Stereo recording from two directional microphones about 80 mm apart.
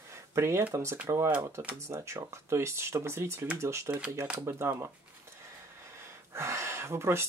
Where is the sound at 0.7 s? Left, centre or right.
Right.